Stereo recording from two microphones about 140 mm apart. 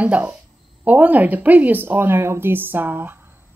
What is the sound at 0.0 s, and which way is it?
Speech, 10° right (ahead or behind).